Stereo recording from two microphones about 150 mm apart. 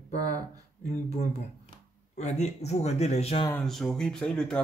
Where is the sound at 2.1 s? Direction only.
50° left (ahead or behind).